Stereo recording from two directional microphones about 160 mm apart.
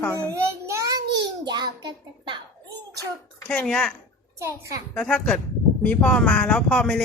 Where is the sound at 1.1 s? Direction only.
25° right (ahead or behind).